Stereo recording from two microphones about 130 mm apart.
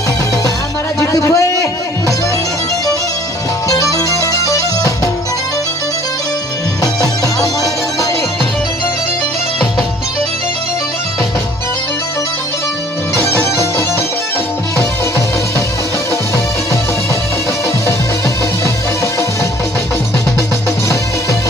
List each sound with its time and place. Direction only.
0.9 s music: 25° left (ahead or behind)
3.7 s music: 25° left (ahead or behind)
7.0 s music: 25° left (ahead or behind)
13.1 s music: 20° left (ahead or behind)